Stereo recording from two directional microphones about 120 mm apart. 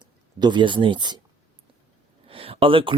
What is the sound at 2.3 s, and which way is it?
Speech, 50° right (ahead or behind).